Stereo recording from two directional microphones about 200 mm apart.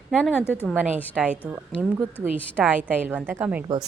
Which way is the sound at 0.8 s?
10° right (ahead or behind).